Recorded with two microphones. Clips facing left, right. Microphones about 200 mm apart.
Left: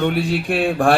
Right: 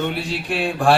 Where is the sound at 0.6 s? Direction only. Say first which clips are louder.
Left 1 dB; 55° left (ahead or behind).